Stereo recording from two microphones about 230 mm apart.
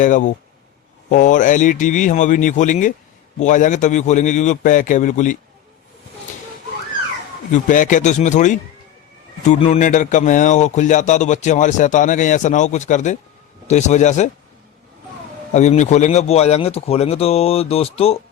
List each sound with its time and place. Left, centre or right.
0.0 s a man's voice: left
7.5 s a man's voice: left
15.5 s speech: left